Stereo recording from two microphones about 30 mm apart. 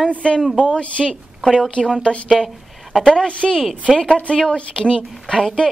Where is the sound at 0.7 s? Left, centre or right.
Left.